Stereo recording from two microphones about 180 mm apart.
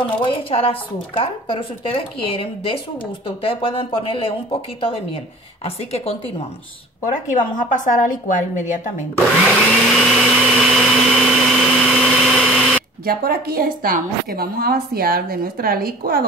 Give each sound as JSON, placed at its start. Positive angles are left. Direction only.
{"t": 0.2, "sound": "speech", "side_deg": 30}
{"t": 5.9, "sound": "speech", "side_deg": 35}
{"t": 7.1, "sound": "a woman's voice", "side_deg": 45}
{"t": 9.5, "sound": "blender", "side_deg": 0}
{"t": 13.0, "sound": "a woman's voice", "side_deg": -55}